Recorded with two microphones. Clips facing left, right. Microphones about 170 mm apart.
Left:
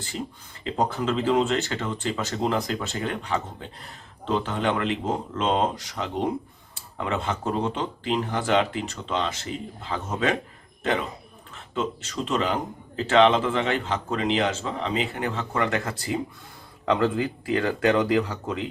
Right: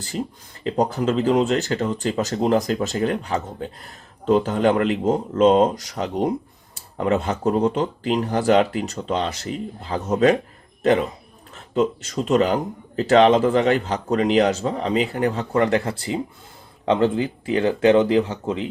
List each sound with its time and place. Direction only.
0.6 s speech: 40° right (ahead or behind)
11.5 s speech: 40° right (ahead or behind)